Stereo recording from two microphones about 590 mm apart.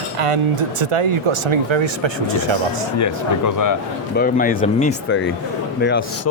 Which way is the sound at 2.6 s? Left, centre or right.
Left.